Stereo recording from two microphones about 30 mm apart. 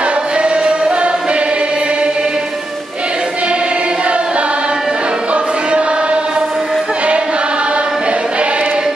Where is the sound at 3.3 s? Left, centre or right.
Right.